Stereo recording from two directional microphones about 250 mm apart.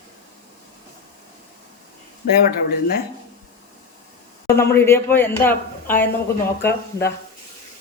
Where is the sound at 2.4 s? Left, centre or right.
Left.